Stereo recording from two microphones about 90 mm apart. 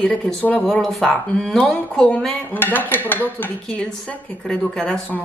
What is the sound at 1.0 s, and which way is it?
Speech, 15° left (ahead or behind).